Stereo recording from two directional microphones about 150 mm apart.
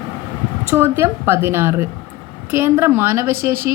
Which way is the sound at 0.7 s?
15° right (ahead or behind).